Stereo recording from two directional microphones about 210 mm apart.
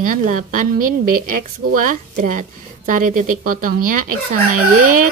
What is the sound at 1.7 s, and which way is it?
A woman's voice, 40° right (ahead or behind).